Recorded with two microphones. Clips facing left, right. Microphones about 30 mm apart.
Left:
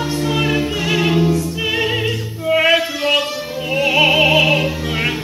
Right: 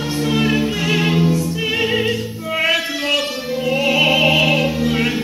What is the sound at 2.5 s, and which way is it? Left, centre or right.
Music, left.